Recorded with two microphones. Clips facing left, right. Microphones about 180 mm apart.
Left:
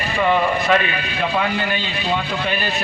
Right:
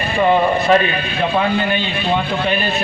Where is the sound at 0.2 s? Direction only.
30° right (ahead or behind).